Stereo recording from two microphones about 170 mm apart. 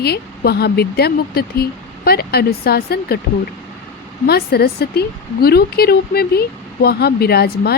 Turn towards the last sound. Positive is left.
turn(degrees=70)  # may be behind; listen again after turning